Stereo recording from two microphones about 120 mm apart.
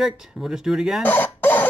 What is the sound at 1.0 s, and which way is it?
Cough, 15° left (ahead or behind).